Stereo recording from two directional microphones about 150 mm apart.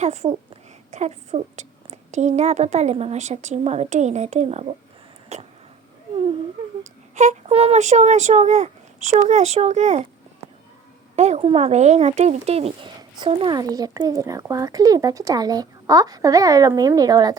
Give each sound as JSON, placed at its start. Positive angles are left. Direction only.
{"t": 0.0, "sound": "speech", "side_deg": -45}
{"t": 7.2, "sound": "speech", "side_deg": -45}
{"t": 11.2, "sound": "speech", "side_deg": -45}
{"t": 13.0, "sound": "speech", "side_deg": -30}